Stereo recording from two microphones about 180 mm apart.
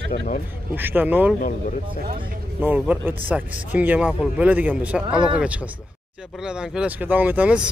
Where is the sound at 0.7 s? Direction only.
10° right (ahead or behind).